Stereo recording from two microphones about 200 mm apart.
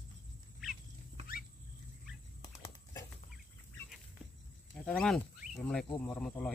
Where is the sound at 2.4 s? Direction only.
20° left (ahead or behind).